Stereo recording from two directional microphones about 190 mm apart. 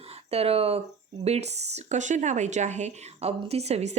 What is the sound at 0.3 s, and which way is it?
Speech, 30° right (ahead or behind).